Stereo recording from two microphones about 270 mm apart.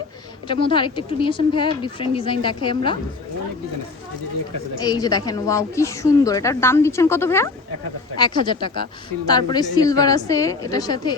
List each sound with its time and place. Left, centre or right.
0.4 s a woman's voice: centre
4.8 s a woman's voice: centre